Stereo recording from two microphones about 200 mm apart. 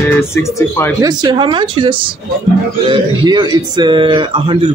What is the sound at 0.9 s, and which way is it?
Speech, 20° right (ahead or behind).